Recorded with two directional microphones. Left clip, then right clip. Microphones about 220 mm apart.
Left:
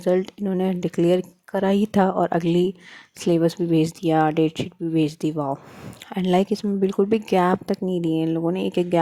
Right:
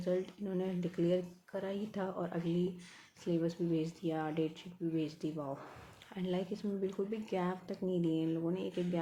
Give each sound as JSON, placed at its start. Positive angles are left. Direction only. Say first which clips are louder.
{"t": 0.0, "sound": "speech", "louder": "left 15 dB", "side_deg": 40}